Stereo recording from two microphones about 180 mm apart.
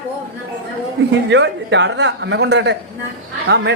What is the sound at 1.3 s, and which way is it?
A man's voice, 80° right.